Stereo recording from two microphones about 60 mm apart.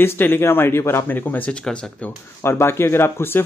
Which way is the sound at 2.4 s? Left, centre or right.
Left.